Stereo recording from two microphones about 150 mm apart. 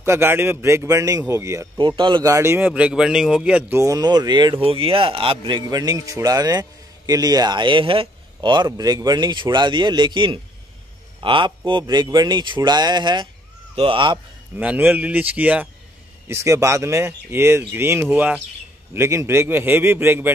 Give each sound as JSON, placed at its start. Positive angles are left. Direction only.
{"t": 0.0, "sound": "a man's voice", "side_deg": -15}
{"t": 1.8, "sound": "speech", "side_deg": -30}
{"t": 2.3, "sound": "a man's voice", "side_deg": -15}
{"t": 5.7, "sound": "a man's voice", "side_deg": -25}
{"t": 14.6, "sound": "speech", "side_deg": -10}